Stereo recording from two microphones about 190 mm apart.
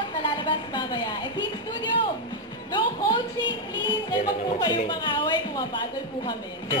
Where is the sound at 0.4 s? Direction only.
25° left (ahead or behind).